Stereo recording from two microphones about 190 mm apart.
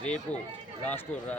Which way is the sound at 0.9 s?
10° left (ahead or behind).